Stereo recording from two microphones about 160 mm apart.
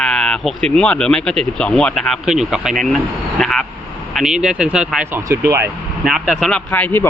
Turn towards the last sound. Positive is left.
turn(degrees=10)  # may be behind; listen again after turning